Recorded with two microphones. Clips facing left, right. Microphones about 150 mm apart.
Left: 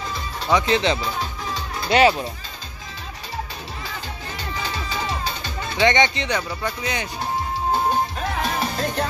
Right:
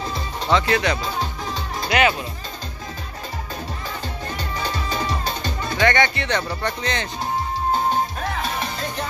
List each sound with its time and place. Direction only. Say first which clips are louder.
0.5 s speech: left 1 dB; 20° left (ahead or behind)
1.9 s speech: left 3 dB; 30° left (ahead or behind)
4.6 s music: right 3 dB; 45° right (ahead or behind)
5.8 s speech: left 1 dB; 20° left (ahead or behind)
6.3 s speech: right 2 dB; 10° left (ahead or behind)